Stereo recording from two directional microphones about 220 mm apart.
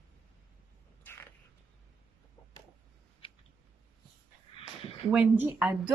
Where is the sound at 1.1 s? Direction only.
10° left (ahead or behind).